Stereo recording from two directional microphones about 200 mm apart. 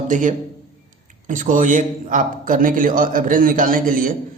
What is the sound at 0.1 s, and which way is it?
A man's voice, 40° right (ahead or behind).